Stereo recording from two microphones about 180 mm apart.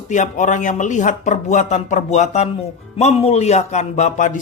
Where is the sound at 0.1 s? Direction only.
45° left (ahead or behind).